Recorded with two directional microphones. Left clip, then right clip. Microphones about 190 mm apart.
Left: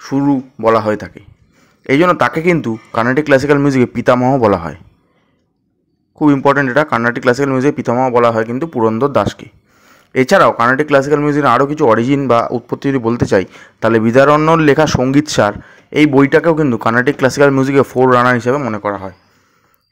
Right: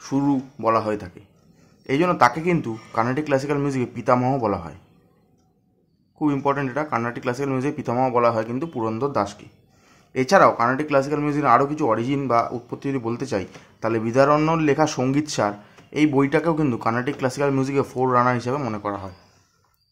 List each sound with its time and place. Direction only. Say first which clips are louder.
0.0 s a man's voice: left 8 dB; 25° left (ahead or behind)
6.1 s a man's voice: left 11 dB; 35° left (ahead or behind)